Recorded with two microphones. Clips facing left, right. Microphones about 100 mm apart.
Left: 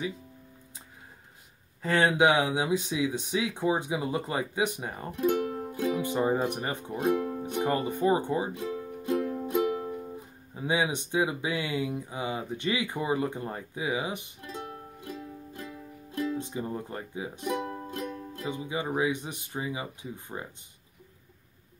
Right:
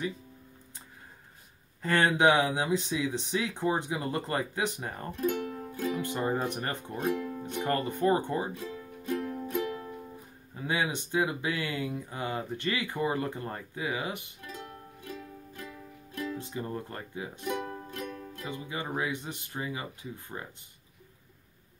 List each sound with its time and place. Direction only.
1.8 s speech: 5° left (ahead or behind)
7.4 s music: 15° left (ahead or behind)
10.5 s speech: 15° left (ahead or behind)
17.8 s music: 25° left (ahead or behind)
18.6 s speech: 15° left (ahead or behind)